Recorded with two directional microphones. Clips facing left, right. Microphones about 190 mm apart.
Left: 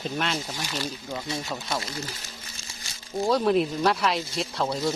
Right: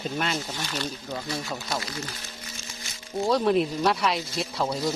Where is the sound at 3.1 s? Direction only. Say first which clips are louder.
Even; centre (ahead or behind).